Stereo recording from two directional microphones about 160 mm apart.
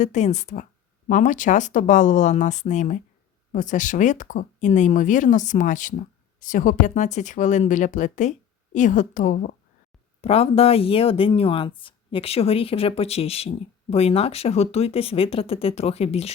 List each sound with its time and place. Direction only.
0.0 s speech: 50° left (ahead or behind)
10.2 s speech: 40° left (ahead or behind)